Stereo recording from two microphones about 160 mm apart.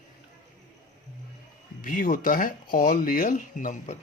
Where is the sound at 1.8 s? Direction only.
60° left (ahead or behind).